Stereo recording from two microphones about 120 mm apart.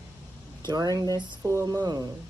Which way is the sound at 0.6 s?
35° right (ahead or behind).